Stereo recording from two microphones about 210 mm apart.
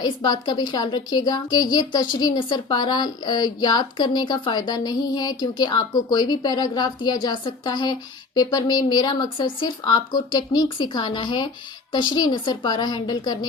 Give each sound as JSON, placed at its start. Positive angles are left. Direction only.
{"t": 0.0, "sound": "a woman's voice", "side_deg": 20}